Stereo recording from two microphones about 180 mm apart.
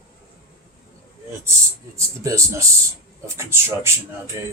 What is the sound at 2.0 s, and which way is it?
Speech, 15° right (ahead or behind).